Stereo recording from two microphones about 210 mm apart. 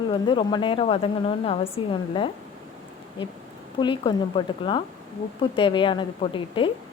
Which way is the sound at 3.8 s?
20° left (ahead or behind).